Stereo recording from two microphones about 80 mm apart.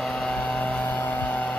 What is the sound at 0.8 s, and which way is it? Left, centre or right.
Vehicle, left.